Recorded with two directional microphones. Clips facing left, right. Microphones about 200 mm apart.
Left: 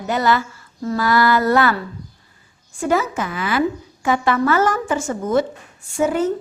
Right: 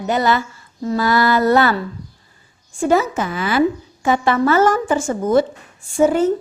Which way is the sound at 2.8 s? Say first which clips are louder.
Right 3 dB; 30° right (ahead or behind).